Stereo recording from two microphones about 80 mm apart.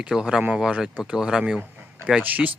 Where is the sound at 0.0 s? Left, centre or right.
Centre.